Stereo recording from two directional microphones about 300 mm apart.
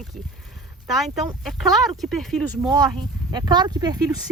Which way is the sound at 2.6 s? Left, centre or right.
Centre.